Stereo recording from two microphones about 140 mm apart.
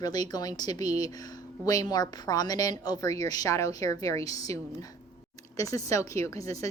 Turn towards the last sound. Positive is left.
turn(degrees=25)  # may be behind; listen again after turning